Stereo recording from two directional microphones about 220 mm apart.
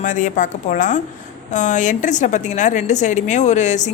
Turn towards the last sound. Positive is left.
turn(degrees=35)  # may be behind; listen again after turning